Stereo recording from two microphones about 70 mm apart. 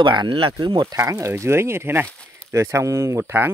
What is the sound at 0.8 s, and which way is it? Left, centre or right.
Speech, right.